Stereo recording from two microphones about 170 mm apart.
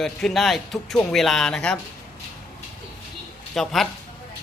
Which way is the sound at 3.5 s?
Centre (ahead or behind).